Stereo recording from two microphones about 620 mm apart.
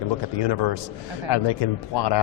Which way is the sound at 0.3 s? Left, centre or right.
Left.